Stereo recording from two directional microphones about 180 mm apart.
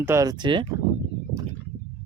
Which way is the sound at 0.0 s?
15° right (ahead or behind).